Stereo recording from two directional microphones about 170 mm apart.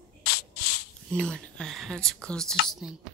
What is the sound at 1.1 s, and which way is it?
Speech, 5° left (ahead or behind).